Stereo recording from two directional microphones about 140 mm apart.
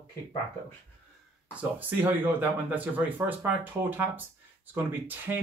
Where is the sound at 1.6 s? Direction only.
10° right (ahead or behind).